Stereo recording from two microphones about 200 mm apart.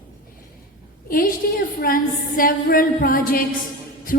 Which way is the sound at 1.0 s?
45° left (ahead or behind).